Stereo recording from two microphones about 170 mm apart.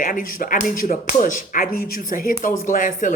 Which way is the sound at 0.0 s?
55° left (ahead or behind).